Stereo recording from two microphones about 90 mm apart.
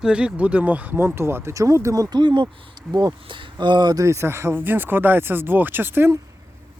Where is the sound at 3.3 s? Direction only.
60° right (ahead or behind).